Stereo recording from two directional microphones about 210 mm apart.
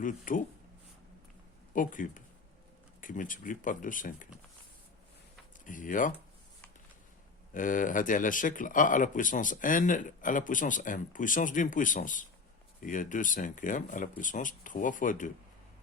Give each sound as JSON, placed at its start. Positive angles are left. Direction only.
{"t": 0.0, "sound": "speech", "side_deg": 40}
{"t": 1.7, "sound": "speech", "side_deg": 40}
{"t": 5.6, "sound": "speech", "side_deg": 40}
{"t": 7.5, "sound": "speech", "side_deg": 40}